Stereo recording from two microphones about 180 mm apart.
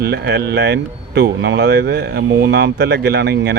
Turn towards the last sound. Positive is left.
turn(degrees=-65)  # may be behind; listen again after turning